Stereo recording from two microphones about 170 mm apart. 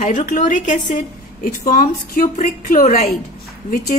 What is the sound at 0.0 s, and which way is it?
A woman's voice, 45° left (ahead or behind).